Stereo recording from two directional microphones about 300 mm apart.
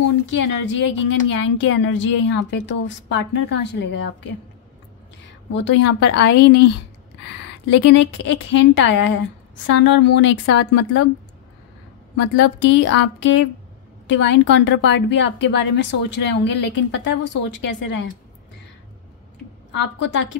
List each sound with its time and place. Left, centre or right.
0.5 s speech: left
5.5 s speech: left
7.7 s speech: left
12.2 s speech: left